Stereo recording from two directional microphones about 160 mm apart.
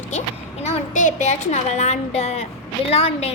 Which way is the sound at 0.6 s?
55° left (ahead or behind).